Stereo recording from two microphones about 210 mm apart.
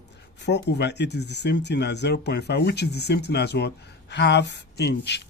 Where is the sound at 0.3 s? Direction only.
55° left (ahead or behind).